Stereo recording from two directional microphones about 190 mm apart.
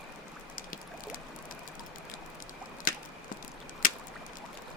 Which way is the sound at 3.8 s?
45° left (ahead or behind).